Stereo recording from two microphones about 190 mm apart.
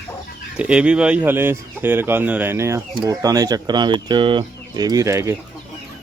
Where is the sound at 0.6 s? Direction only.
5° right (ahead or behind).